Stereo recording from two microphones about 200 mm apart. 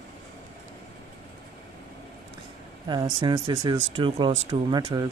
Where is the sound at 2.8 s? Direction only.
20° right (ahead or behind).